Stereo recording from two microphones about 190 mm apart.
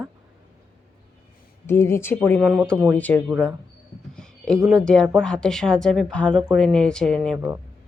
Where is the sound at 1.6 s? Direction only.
15° left (ahead or behind).